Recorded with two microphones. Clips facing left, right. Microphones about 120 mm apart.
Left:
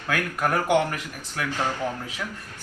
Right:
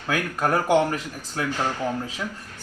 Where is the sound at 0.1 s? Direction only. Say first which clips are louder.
Right 2 dB; 25° right (ahead or behind).